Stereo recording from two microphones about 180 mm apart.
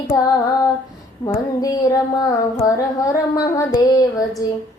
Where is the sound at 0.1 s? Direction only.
20° left (ahead or behind).